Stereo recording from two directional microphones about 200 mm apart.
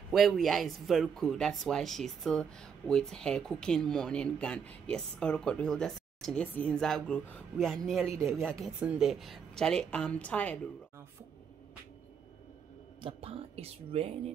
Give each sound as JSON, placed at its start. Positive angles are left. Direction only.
{"t": 0.1, "sound": "speech", "side_deg": 0}
{"t": 13.0, "sound": "speech", "side_deg": -30}